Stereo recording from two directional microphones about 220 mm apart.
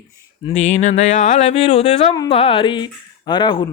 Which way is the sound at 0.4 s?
30° left (ahead or behind).